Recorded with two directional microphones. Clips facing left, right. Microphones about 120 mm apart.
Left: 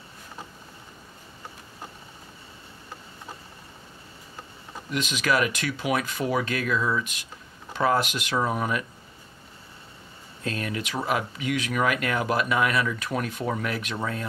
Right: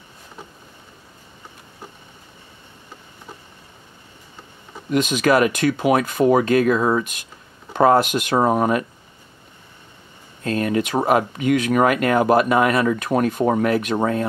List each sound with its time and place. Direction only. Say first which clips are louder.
4.9 s speech: right 8 dB; 50° right (ahead or behind)
10.4 s speech: right 10 dB; 45° right (ahead or behind)